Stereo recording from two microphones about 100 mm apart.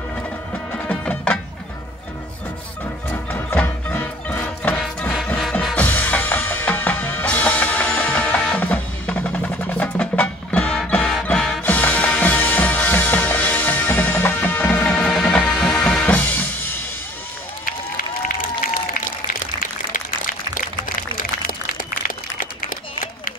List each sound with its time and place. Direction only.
0.8 s music: 10° left (ahead or behind)
3.1 s music: 20° left (ahead or behind)
5.1 s music: centre (ahead or behind)
5.8 s music: 15° left (ahead or behind)